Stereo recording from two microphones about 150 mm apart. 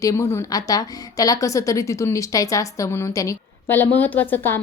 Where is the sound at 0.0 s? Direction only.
20° left (ahead or behind).